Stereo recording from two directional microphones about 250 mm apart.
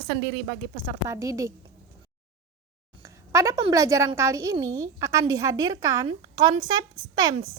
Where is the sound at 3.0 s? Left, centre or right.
Centre.